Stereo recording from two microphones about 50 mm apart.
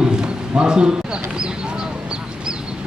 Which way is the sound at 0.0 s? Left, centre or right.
Centre.